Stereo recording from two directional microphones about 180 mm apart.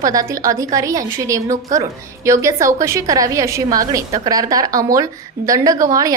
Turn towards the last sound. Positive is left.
turn(degrees=-20)  # may be behind; listen again after turning